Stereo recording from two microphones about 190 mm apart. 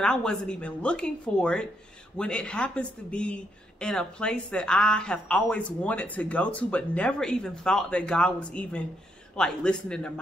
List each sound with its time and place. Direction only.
0.0 s a woman's voice: 5° left (ahead or behind)